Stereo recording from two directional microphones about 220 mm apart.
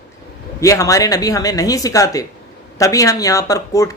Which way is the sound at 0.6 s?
15° left (ahead or behind).